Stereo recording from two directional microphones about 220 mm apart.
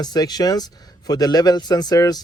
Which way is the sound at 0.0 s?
20° left (ahead or behind).